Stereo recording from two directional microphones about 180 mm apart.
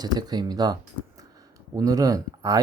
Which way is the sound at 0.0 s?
20° right (ahead or behind).